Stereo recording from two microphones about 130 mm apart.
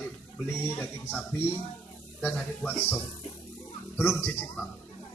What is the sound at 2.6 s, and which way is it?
Speech, 10° left (ahead or behind).